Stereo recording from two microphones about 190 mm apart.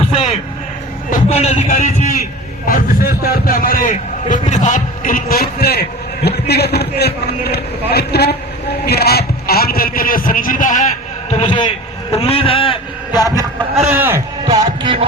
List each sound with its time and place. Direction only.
0.1 s a sound: 30° left (ahead or behind)
1.1 s speech: 35° left (ahead or behind)
2.6 s a man's voice: 50° left (ahead or behind); by 13.4 s 20° left (ahead or behind)
13.9 s a man's voice: 10° right (ahead or behind)
14.4 s music: 25° right (ahead or behind)